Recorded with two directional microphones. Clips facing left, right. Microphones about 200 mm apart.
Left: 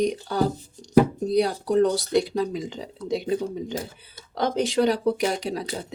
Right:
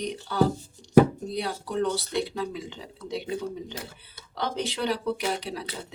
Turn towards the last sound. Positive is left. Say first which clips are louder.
# left 6 dB
turn(degrees=45)  # may be behind; listen again after turning